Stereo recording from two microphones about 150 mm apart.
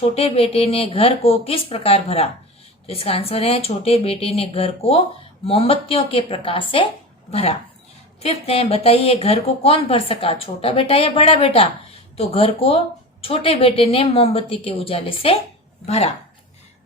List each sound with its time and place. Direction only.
0.0 s speech: 40° left (ahead or behind)